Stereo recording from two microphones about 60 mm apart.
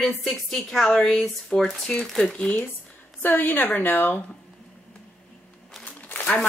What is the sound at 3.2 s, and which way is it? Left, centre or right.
A woman's voice, left.